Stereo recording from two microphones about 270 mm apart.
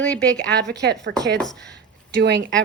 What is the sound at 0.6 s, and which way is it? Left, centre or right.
Speech, right.